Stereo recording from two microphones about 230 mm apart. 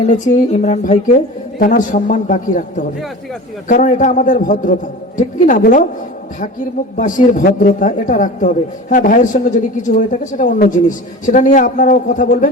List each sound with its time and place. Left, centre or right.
0.0 s a man's voice: left
6.9 s a man's voice: left